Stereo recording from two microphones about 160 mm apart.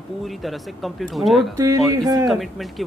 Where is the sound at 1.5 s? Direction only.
20° right (ahead or behind).